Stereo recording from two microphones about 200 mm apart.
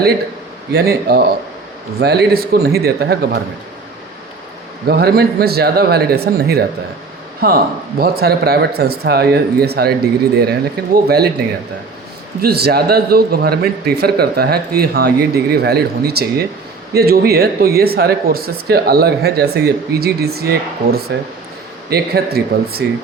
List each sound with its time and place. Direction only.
0.7 s speech: 50° right (ahead or behind)
4.9 s speech: 50° right (ahead or behind)